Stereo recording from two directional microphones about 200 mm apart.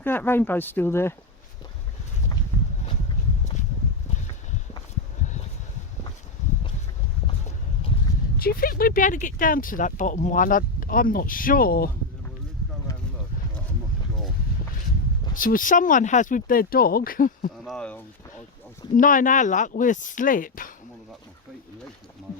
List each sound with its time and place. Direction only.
0.0 s speech: 10° left (ahead or behind)
8.4 s speech: 45° left (ahead or behind)
15.4 s speech: 45° left (ahead or behind)
17.7 s speech: 5° left (ahead or behind)
18.9 s speech: 40° left (ahead or behind)